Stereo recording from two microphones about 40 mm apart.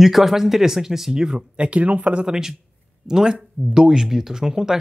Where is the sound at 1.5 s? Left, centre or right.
Right.